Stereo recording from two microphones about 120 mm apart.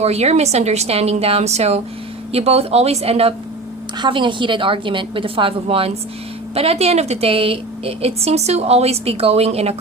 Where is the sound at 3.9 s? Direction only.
40° right (ahead or behind).